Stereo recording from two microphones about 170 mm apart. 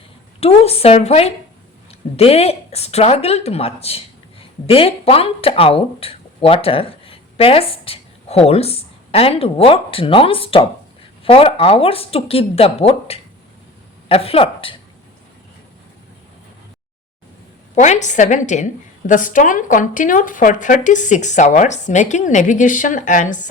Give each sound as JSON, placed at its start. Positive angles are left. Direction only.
{"t": 0.3, "sound": "speech", "side_deg": 35}
{"t": 17.7, "sound": "a woman's voice", "side_deg": 45}